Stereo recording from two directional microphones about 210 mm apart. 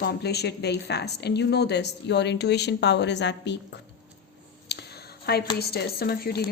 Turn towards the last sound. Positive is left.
turn(degrees=50)  # may be behind; listen again after turning